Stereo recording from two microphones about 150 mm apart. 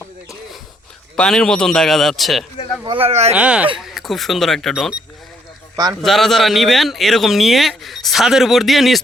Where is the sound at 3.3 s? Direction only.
10° right (ahead or behind).